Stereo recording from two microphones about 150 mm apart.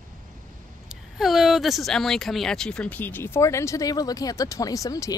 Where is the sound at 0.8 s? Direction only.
Centre (ahead or behind).